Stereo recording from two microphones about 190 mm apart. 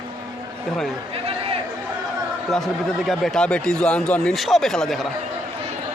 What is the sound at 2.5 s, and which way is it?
Speech, centre (ahead or behind).